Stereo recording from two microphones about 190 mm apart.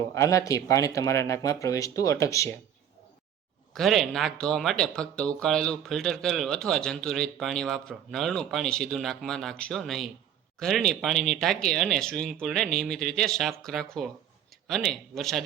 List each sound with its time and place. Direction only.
0.1 s speech: 15° left (ahead or behind)
3.8 s speech: centre (ahead or behind)